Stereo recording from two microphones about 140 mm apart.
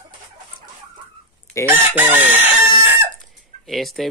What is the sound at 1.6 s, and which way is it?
Chicken, 15° right (ahead or behind).